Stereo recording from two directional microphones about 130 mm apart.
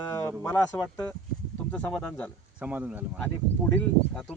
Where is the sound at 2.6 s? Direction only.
10° right (ahead or behind).